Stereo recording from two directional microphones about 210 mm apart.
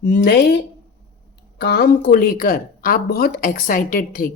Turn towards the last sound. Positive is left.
turn(degrees=40)  # may be behind; listen again after turning